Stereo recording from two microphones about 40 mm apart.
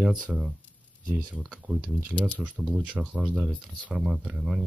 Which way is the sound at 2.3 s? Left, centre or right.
Right.